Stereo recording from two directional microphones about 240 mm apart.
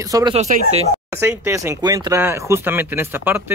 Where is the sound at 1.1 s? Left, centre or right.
Centre.